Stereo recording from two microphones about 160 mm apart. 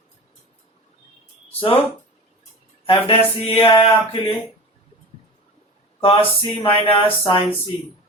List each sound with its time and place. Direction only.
1.5 s speech: 35° left (ahead or behind)
2.8 s speech: 35° left (ahead or behind)
6.0 s speech: 35° left (ahead or behind)